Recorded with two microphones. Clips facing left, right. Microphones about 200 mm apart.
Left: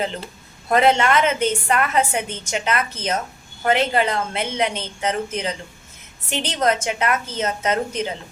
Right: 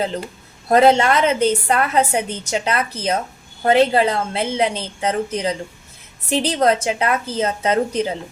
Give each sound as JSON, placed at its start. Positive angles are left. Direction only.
{"t": 0.7, "sound": "a woman's voice", "side_deg": -35}